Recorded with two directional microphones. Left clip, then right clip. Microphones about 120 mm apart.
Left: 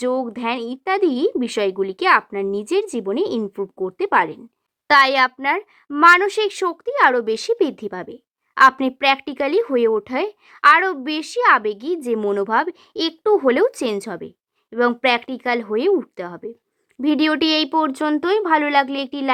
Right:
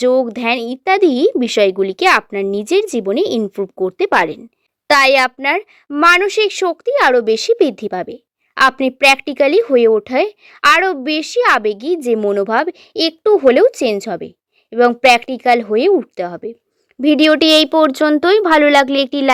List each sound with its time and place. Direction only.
0.0 s speech: 30° right (ahead or behind)
4.9 s speech: 25° right (ahead or behind); by 19.3 s 40° right (ahead or behind)